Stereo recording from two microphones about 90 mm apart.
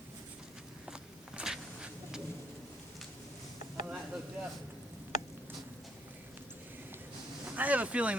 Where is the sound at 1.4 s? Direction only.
10° right (ahead or behind).